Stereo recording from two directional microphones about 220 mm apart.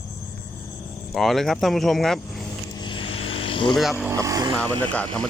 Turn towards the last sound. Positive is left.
turn(degrees=10)  # may be behind; listen again after turning